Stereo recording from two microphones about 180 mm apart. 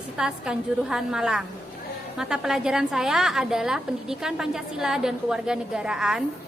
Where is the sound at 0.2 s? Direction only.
5° right (ahead or behind).